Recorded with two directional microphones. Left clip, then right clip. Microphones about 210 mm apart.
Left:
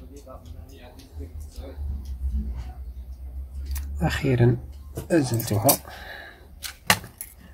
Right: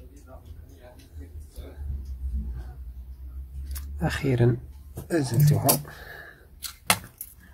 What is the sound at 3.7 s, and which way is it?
Speech, 10° right (ahead or behind).